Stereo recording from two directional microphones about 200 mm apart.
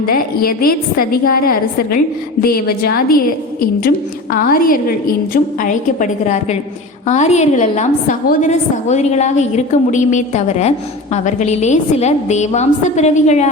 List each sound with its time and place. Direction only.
0.0 s a woman's voice: 50° left (ahead or behind)